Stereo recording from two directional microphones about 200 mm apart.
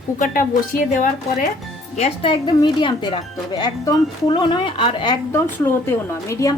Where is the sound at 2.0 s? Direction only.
30° left (ahead or behind).